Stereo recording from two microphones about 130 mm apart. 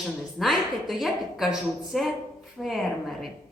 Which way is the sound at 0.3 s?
Centre (ahead or behind).